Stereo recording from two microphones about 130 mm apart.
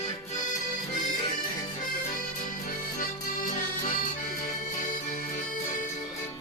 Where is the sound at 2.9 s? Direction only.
90° left.